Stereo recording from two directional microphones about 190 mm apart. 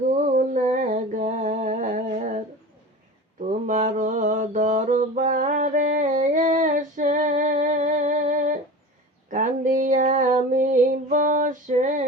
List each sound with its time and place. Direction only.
0.3 s a sound: 45° right (ahead or behind)
3.7 s mantra: 40° right (ahead or behind)
9.3 s female singing: 45° right (ahead or behind)